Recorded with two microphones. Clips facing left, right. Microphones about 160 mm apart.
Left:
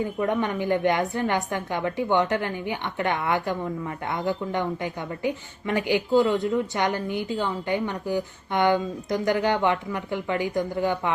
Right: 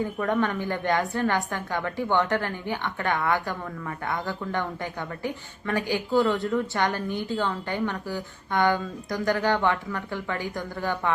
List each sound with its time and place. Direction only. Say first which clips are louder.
0.2 s a woman's voice: left 1 dB; 20° left (ahead or behind)